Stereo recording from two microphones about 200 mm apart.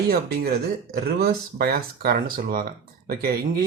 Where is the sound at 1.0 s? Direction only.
50° right (ahead or behind).